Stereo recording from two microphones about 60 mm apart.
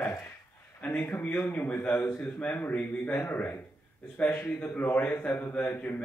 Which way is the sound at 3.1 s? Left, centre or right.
Left.